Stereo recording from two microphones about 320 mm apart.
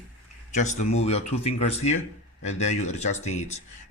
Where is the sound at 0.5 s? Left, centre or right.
Left.